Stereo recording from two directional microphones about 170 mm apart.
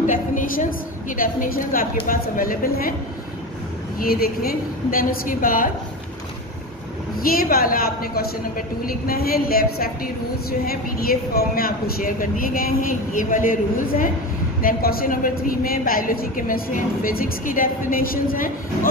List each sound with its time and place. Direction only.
0.0 s a woman's voice: 50° left (ahead or behind)
4.0 s speech: 65° left (ahead or behind)
7.2 s speech: 60° left (ahead or behind)